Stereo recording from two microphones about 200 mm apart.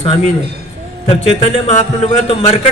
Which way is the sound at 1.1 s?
35° left (ahead or behind).